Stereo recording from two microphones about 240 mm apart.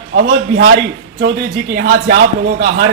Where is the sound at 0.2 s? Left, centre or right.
Right.